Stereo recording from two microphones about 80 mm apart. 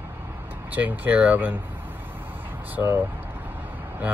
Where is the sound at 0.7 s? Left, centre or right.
Right.